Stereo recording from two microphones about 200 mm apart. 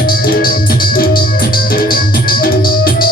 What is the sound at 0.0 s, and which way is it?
Music, 45° left (ahead or behind).